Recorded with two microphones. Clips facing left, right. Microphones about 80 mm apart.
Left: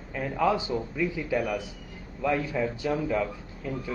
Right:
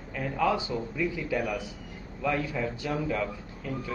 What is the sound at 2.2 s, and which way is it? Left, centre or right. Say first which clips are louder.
Speech: left 2 dB; centre.